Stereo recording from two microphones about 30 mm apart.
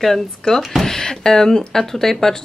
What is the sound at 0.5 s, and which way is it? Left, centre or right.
Speech, left.